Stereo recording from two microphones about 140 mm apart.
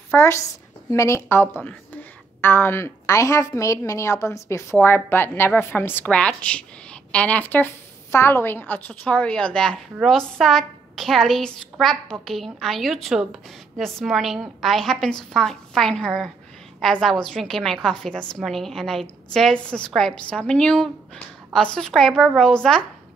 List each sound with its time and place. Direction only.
0.1 s a woman's voice: 20° left (ahead or behind)